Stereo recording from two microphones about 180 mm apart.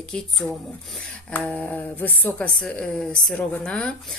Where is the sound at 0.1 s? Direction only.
5° left (ahead or behind).